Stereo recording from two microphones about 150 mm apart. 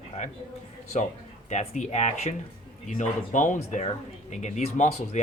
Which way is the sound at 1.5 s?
50° left (ahead or behind).